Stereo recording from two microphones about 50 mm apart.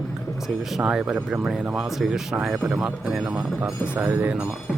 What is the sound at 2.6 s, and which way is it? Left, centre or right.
Speech, right.